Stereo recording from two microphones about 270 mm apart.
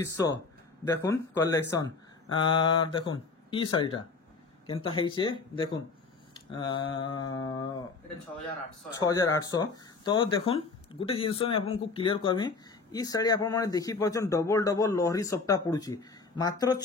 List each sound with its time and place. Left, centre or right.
0.0 s speech: centre
9.0 s speech: centre